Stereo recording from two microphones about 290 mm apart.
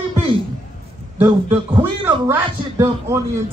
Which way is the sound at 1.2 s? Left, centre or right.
Centre.